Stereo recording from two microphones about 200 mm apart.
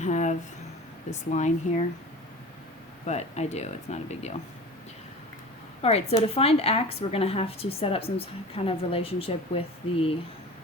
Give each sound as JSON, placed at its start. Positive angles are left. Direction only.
{"t": 0.0, "sound": "a sound", "side_deg": 35}
{"t": 1.3, "sound": "speech", "side_deg": 35}
{"t": 3.1, "sound": "speech", "side_deg": 35}
{"t": 5.8, "sound": "speech", "side_deg": 30}